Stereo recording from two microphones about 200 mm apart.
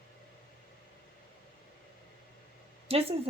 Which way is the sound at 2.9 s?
30° right (ahead or behind).